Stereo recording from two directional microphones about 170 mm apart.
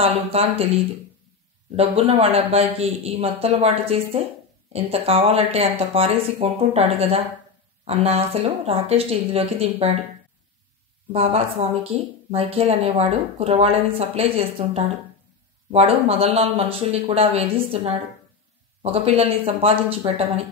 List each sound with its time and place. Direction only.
0.0 s speech: 35° right (ahead or behind)
1.8 s speech: 35° right (ahead or behind)
11.1 s speech: 35° right (ahead or behind)